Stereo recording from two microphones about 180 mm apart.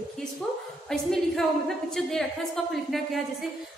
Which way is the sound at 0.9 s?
Centre (ahead or behind).